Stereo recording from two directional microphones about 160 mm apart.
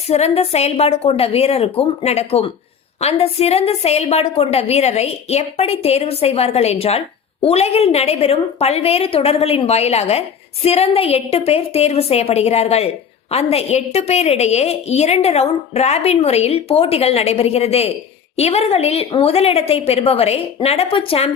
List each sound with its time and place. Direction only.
0.1 s a woman's voice: 40° left (ahead or behind)